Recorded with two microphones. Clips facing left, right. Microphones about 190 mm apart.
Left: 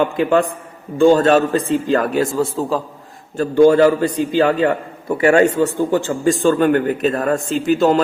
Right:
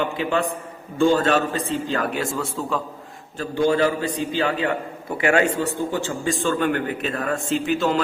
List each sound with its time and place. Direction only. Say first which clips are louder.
0.0 s a man's voice: left 7 dB; 50° left (ahead or behind)
3.3 s a man's voice: left 9 dB; 50° left (ahead or behind)